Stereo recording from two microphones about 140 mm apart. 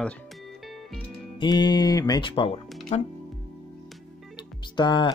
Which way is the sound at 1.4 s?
30° left (ahead or behind).